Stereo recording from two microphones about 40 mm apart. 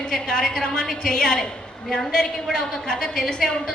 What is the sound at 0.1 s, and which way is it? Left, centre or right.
A man's voice, centre.